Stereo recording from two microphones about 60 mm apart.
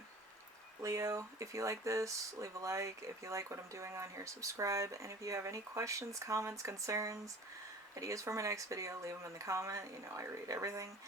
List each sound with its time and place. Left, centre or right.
0.8 s speech: right